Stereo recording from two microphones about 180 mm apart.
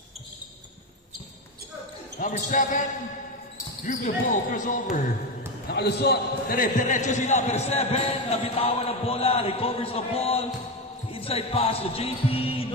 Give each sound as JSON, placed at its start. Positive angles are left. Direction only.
{"t": 2.1, "sound": "speech", "side_deg": 45}
{"t": 5.7, "sound": "a man's voice", "side_deg": 65}